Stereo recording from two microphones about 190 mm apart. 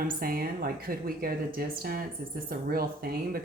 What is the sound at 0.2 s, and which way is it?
Speech, 50° right (ahead or behind).